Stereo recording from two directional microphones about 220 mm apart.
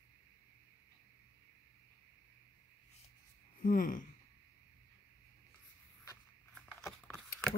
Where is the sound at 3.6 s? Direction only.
40° left (ahead or behind).